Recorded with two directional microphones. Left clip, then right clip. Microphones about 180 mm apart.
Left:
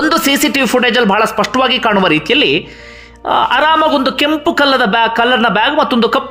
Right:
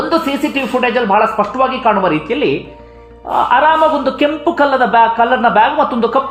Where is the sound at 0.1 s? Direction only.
35° left (ahead or behind).